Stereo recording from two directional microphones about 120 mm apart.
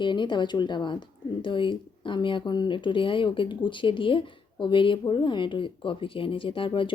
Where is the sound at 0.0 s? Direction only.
40° left (ahead or behind).